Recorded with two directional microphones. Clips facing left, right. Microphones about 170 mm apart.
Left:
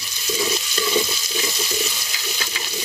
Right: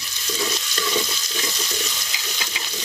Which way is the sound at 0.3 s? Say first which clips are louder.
Left 3 dB; 10° left (ahead or behind).